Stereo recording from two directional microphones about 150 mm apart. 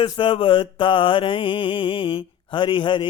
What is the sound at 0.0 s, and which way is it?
Mantra, 35° left (ahead or behind).